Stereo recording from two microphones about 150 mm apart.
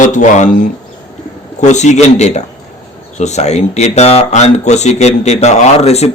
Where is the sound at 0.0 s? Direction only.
55° left (ahead or behind).